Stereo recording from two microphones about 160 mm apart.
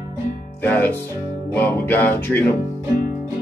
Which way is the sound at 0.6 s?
10° left (ahead or behind).